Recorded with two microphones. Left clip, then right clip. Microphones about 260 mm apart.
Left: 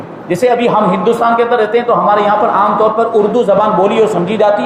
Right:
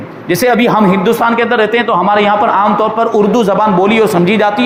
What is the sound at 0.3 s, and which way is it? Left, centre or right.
A man's voice, right.